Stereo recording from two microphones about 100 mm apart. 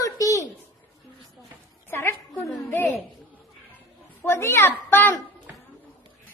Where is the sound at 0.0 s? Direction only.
35° left (ahead or behind).